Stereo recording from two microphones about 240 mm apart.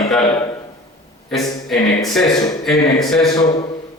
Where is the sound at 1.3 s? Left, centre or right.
Centre.